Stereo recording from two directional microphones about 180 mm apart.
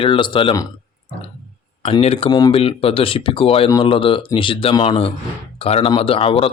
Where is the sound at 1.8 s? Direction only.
35° left (ahead or behind).